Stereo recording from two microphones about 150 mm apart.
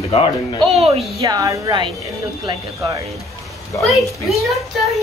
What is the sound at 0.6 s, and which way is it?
Speech, 40° right (ahead or behind).